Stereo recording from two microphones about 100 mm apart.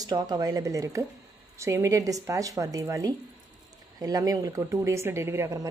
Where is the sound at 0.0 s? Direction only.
40° right (ahead or behind).